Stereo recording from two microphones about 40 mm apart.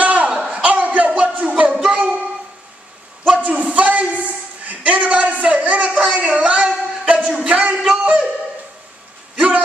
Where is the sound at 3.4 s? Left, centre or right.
Right.